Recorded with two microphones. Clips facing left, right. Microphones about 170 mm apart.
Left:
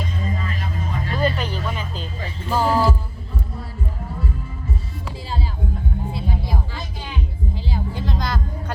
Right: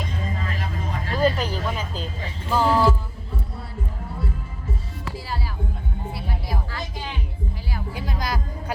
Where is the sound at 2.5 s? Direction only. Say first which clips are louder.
Even; 10° left (ahead or behind).